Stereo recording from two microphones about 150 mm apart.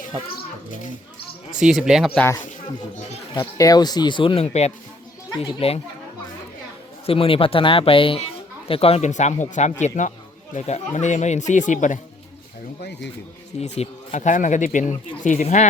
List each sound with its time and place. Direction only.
1.5 s speech: 5° right (ahead or behind)
2.1 s speech: 15° left (ahead or behind)
3.6 s speech: 25° left (ahead or behind)
7.0 s speech: 40° left (ahead or behind); by 11.9 s 55° left (ahead or behind)
13.6 s speech: 45° left (ahead or behind)